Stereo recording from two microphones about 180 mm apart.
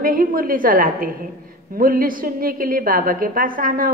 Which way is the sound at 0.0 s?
50° right (ahead or behind).